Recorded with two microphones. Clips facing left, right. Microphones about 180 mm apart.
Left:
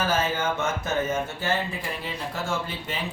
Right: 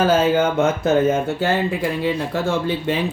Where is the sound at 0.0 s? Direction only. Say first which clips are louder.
Right 9 dB; 60° right (ahead or behind).